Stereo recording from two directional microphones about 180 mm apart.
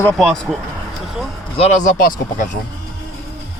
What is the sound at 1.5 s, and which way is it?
Speech, 40° left (ahead or behind).